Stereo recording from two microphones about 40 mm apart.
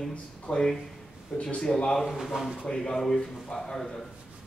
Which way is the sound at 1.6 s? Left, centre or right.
Centre.